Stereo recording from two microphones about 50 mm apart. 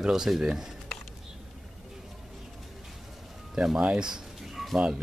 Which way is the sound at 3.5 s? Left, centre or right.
Centre.